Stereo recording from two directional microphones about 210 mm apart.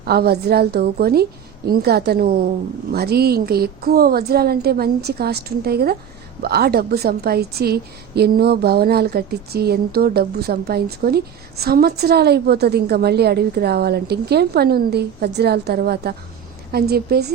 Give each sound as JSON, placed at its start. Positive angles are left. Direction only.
{"t": 0.0, "sound": "a woman's voice", "side_deg": -50}